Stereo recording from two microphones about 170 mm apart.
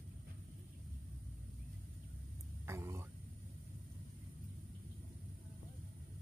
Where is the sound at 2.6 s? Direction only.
15° right (ahead or behind).